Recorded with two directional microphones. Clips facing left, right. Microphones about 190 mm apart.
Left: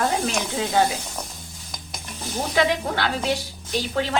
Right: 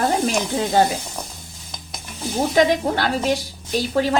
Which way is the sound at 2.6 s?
40° right (ahead or behind).